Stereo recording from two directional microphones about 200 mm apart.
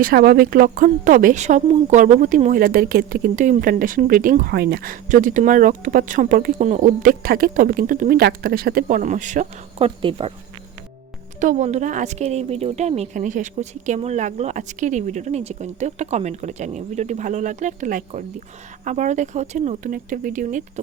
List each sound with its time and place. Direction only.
0.0 s a woman's voice: 50° right (ahead or behind); by 10.3 s 25° right (ahead or behind)
11.3 s speech: 40° right (ahead or behind)